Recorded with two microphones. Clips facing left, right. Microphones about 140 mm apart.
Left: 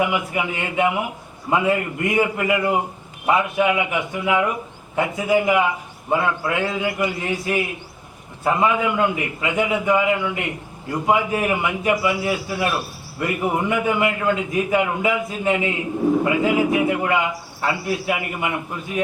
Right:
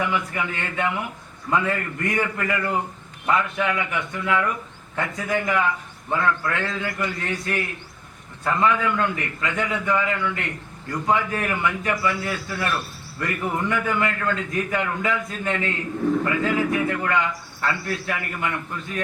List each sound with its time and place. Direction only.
0.0 s a man's voice: 15° left (ahead or behind)
16.0 s a man's voice: 25° left (ahead or behind)